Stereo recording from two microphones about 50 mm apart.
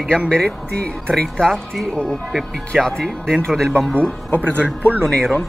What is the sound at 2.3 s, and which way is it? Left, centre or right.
Speech, centre.